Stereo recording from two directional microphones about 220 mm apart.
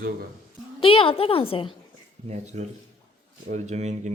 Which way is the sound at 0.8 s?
25° left (ahead or behind).